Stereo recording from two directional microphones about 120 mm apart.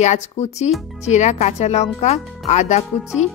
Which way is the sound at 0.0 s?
75° left (ahead or behind).